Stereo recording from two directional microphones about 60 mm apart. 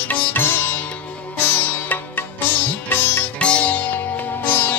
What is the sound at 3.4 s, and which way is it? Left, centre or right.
Sitar, left.